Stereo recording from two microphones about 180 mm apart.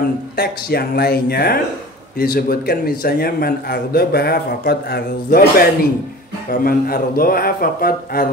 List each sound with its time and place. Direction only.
0.4 s a man's voice: 60° left (ahead or behind)